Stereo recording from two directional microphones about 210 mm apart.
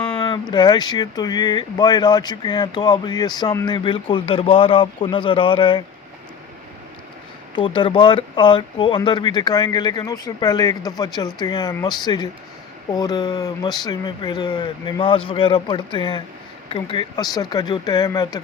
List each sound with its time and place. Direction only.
0.2 s speech: 20° left (ahead or behind)
7.5 s speech: 25° left (ahead or behind)